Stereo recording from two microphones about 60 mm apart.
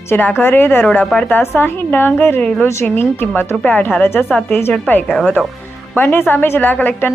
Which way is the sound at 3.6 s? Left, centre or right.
Left.